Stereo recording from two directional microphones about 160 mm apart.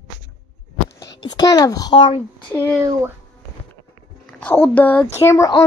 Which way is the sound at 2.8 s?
20° right (ahead or behind).